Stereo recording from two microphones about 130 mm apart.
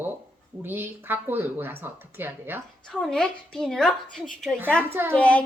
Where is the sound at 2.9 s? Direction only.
5° left (ahead or behind).